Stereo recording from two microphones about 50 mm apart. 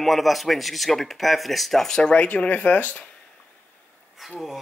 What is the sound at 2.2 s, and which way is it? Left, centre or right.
Speech, left.